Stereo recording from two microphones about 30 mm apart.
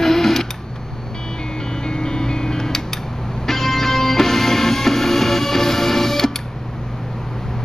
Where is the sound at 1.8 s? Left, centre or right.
Left.